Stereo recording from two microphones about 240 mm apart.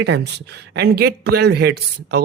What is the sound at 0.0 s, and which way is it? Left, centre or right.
A man's voice, right.